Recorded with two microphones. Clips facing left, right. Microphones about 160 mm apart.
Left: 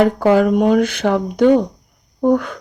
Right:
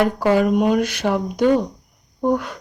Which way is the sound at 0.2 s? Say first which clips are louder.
Left 3 dB; 50° left (ahead or behind).